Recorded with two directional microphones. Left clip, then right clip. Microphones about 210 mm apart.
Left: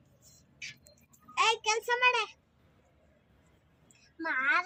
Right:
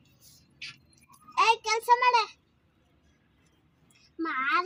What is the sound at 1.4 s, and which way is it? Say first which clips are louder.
Speech: right 4 dB; 10° right (ahead or behind).